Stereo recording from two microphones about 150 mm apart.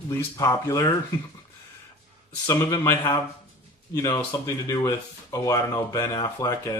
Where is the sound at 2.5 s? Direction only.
20° left (ahead or behind).